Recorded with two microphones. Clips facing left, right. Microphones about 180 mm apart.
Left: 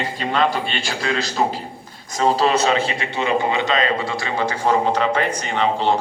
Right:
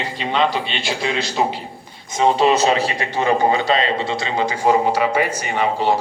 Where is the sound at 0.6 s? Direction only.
45° left (ahead or behind).